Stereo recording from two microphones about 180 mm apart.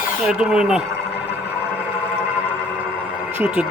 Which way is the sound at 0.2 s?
5° right (ahead or behind).